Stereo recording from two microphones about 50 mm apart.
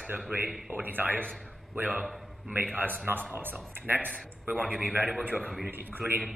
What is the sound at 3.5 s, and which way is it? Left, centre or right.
A man's voice, right.